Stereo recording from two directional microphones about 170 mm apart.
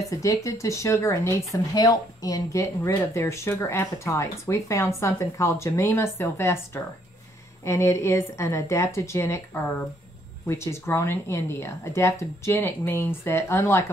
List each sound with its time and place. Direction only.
0.1 s speech: 20° left (ahead or behind)